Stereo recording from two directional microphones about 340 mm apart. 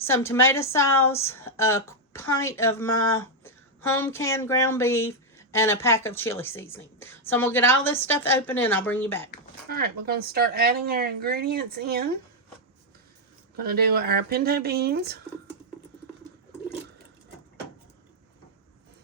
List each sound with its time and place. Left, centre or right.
0.0 s speech: centre
3.9 s a woman's voice: centre
9.6 s speech: right
13.6 s speech: right